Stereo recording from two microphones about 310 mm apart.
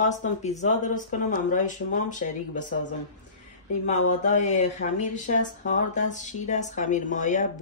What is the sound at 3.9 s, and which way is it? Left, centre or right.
Speech, left.